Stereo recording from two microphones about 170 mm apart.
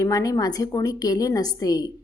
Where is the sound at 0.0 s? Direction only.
20° left (ahead or behind).